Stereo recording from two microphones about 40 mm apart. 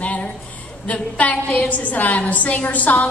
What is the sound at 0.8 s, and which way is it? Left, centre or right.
A woman's voice, left.